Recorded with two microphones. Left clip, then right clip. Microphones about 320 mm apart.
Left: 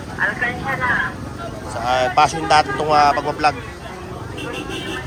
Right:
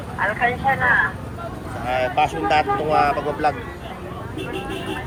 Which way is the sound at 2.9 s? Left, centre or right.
Centre.